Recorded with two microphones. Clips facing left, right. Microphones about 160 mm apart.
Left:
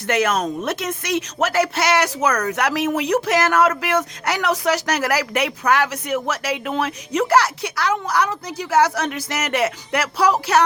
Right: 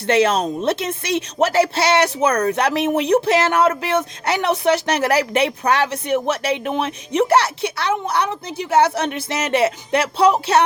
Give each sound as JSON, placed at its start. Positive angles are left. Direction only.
{"t": 0.0, "sound": "speech", "side_deg": -30}